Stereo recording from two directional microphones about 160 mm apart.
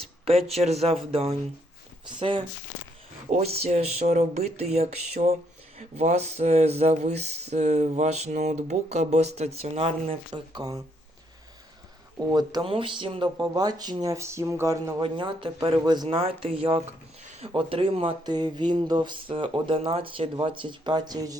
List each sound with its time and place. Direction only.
0.0 s speech: 40° right (ahead or behind)
3.2 s a sound: 45° right (ahead or behind)
3.6 s speech: 40° right (ahead or behind)
5.7 s a sound: 40° right (ahead or behind); by 10.8 s 25° right (ahead or behind)
12.3 s speech: 25° right (ahead or behind)
15.0 s speech: 30° right (ahead or behind)